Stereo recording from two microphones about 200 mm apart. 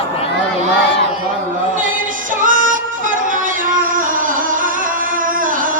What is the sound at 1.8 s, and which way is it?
Music, 40° right (ahead or behind).